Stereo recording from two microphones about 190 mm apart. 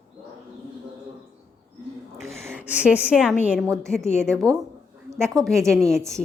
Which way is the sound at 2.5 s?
5° right (ahead or behind).